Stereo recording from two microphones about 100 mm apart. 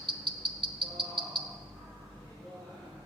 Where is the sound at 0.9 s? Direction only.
55° right (ahead or behind).